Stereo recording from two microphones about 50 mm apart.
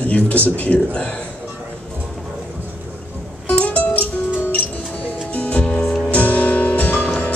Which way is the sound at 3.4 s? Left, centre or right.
Left.